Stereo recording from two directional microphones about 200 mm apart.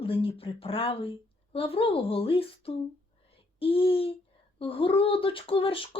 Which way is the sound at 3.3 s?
30° left (ahead or behind).